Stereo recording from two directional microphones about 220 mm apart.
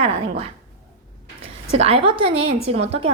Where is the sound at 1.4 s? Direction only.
25° right (ahead or behind).